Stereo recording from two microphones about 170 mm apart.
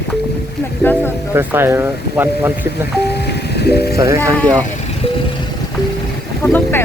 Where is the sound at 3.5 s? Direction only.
70° left (ahead or behind).